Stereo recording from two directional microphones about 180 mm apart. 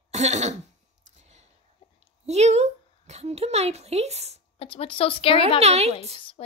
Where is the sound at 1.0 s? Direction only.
40° right (ahead or behind).